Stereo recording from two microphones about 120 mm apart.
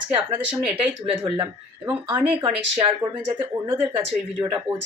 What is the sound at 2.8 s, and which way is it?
Speech, 45° right (ahead or behind).